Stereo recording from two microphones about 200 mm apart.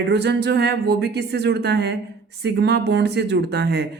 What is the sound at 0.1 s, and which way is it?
Speech, 55° right (ahead or behind).